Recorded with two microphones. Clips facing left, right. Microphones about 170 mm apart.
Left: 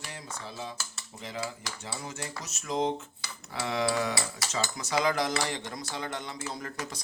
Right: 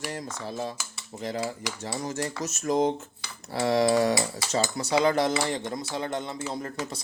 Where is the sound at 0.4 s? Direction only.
40° right (ahead or behind).